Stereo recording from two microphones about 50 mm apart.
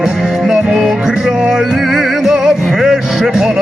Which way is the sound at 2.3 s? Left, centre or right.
Centre.